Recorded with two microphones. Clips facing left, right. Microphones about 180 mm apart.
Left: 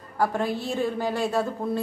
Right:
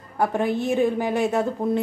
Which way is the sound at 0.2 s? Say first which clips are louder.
Right 3 dB; 20° right (ahead or behind).